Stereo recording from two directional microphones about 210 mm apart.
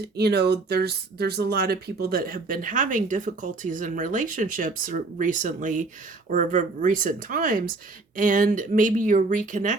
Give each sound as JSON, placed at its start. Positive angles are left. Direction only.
{"t": 0.2, "sound": "speech", "side_deg": -50}